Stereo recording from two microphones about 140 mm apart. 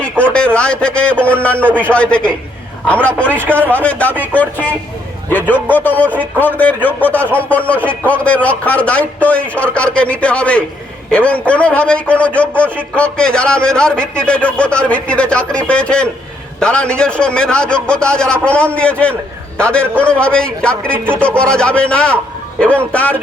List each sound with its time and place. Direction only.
0.0 s a sound: 10° left (ahead or behind)
1.4 s a man's voice: 10° left (ahead or behind)
3.4 s a man's voice: 15° right (ahead or behind)
3.7 s a man's voice: 10° left (ahead or behind)
6.1 s a man's voice: 10° left (ahead or behind)